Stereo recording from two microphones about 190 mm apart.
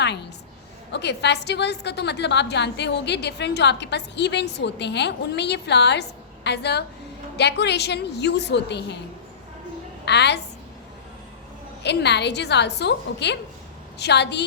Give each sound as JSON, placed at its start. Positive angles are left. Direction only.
{"t": 0.0, "sound": "a sound", "side_deg": 65}
{"t": 0.9, "sound": "a woman's voice", "side_deg": 65}
{"t": 10.1, "sound": "a woman's voice", "side_deg": 65}
{"t": 11.8, "sound": "a woman's voice", "side_deg": 65}